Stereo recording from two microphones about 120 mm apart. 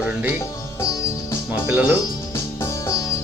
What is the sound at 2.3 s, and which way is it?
Music, 20° left (ahead or behind).